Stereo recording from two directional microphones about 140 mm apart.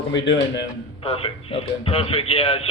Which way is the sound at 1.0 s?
40° left (ahead or behind).